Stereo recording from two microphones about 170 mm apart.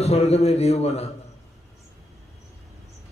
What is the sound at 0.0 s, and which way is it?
A man's voice, 40° left (ahead or behind).